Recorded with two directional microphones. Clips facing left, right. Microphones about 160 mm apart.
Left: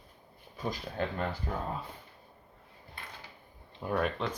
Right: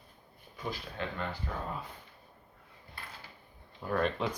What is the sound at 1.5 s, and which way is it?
Speech, 35° left (ahead or behind).